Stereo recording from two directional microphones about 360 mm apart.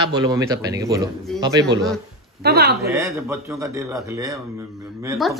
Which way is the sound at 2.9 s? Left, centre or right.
Centre.